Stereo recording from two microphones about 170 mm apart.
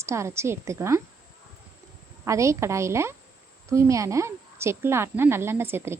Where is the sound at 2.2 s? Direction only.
20° right (ahead or behind).